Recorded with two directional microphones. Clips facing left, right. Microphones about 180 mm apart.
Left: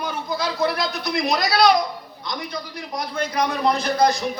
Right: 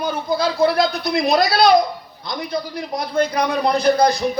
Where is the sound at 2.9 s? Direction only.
35° right (ahead or behind).